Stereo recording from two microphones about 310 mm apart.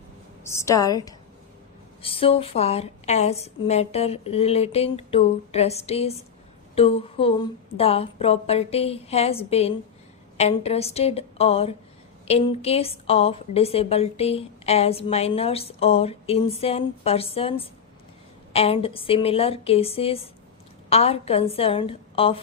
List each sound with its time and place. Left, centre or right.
0.4 s a woman's voice: centre